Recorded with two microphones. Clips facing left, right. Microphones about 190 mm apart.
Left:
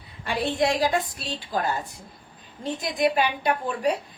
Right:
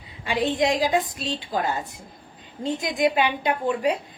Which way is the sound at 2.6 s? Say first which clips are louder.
Right 1 dB; 20° right (ahead or behind).